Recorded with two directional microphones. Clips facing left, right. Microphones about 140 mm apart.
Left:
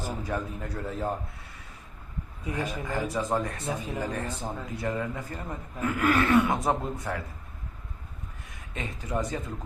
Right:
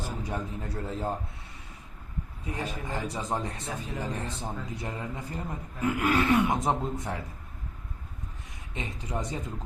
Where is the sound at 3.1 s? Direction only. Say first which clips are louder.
Left 5 dB; 20° right (ahead or behind).